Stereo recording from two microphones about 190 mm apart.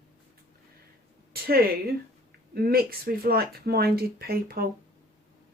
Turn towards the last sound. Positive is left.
turn(degrees=-55)  # may be behind; listen again after turning